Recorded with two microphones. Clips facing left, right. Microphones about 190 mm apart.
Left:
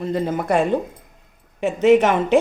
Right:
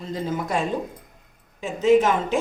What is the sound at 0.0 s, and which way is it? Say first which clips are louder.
Speech: left 5 dB; 60° left (ahead or behind).